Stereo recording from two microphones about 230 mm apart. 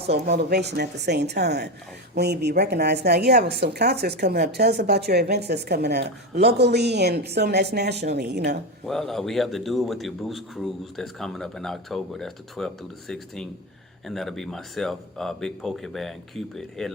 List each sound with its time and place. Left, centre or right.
0.0 s a woman's voice: right
8.9 s a man's voice: centre